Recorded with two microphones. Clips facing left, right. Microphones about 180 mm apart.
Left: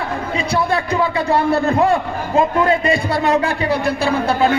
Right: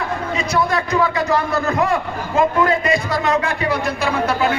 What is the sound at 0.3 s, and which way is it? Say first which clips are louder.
A man's voice: left 1 dB; 30° left (ahead or behind).